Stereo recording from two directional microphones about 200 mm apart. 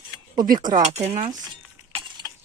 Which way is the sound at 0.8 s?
35° right (ahead or behind).